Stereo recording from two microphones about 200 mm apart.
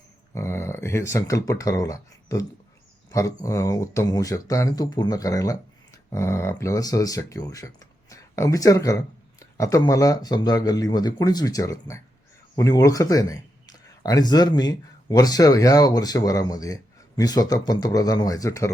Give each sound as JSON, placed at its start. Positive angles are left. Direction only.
{"t": 0.3, "sound": "speech", "side_deg": 15}